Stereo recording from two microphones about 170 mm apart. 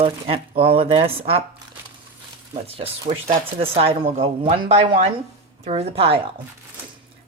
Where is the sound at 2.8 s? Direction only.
35° right (ahead or behind).